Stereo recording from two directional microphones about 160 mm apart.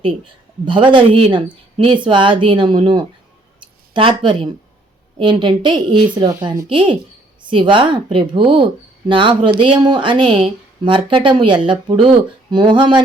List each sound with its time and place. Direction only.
0.6 s speech: 30° right (ahead or behind)